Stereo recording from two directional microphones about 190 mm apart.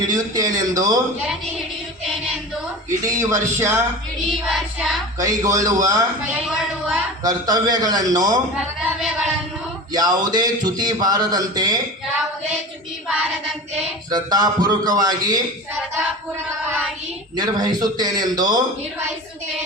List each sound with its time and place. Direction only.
0.1 s a man's voice: 20° right (ahead or behind)
3.1 s a man's voice: 15° right (ahead or behind)
4.3 s child singing: centre (ahead or behind)
5.2 s a man's voice: 15° right (ahead or behind)
7.2 s a man's voice: 20° right (ahead or behind)
8.5 s a sound: 5° right (ahead or behind)
9.9 s a man's voice: 20° right (ahead or behind)
14.1 s a man's voice: 20° right (ahead or behind)
17.3 s a man's voice: 20° right (ahead or behind)